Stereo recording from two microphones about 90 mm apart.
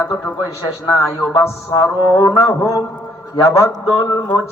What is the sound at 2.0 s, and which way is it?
Speech, 45° left (ahead or behind).